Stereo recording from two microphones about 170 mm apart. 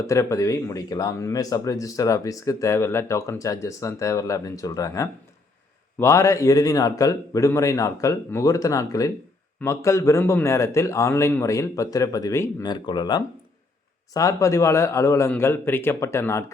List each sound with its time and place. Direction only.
0.0 s a man's voice: 20° left (ahead or behind)